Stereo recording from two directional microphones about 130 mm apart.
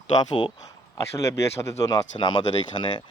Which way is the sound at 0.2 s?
35° left (ahead or behind).